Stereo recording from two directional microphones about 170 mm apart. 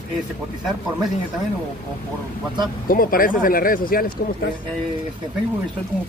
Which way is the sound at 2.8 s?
55° left (ahead or behind).